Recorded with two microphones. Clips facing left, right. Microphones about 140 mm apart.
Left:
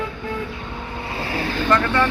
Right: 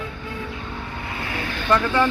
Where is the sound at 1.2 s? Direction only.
30° left (ahead or behind).